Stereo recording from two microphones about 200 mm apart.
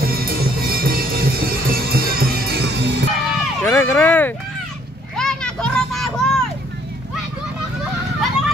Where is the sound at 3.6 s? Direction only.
10° left (ahead or behind).